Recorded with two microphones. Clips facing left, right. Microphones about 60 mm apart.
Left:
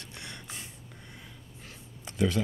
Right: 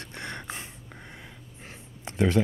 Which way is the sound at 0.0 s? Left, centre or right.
Right.